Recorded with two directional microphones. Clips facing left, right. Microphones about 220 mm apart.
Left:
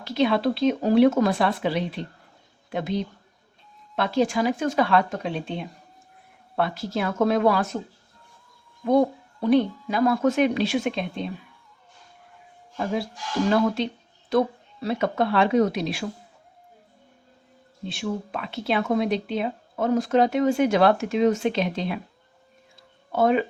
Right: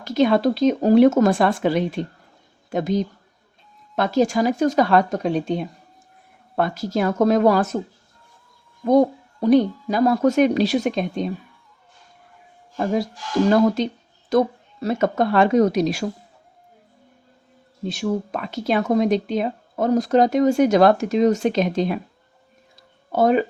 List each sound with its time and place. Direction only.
0.0 s speech: 45° right (ahead or behind)
8.8 s speech: 40° right (ahead or behind)
12.7 s speech: 40° right (ahead or behind)
17.8 s speech: 40° right (ahead or behind)
22.7 s a sound: 40° right (ahead or behind)